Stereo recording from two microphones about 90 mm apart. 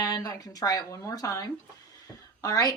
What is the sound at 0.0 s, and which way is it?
A woman's voice, 45° left (ahead or behind).